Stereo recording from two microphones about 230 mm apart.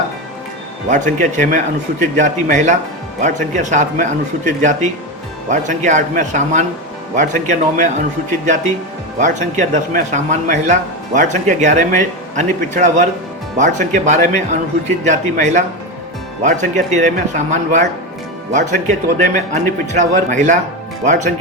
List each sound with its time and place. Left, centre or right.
0.9 s a man's voice: right
9.1 s a man's voice: right